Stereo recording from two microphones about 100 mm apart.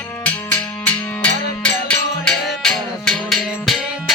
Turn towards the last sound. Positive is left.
turn(degrees=0)  # may be behind; listen again after turning